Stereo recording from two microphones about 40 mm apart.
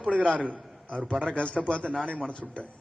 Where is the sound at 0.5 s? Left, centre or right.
Centre.